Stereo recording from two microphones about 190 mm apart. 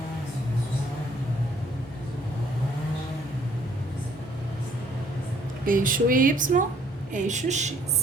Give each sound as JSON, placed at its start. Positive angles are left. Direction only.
{"t": 5.6, "sound": "a woman's voice", "side_deg": -45}